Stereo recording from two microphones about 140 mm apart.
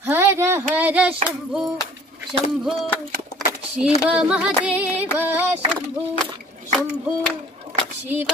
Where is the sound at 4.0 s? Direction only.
10° right (ahead or behind).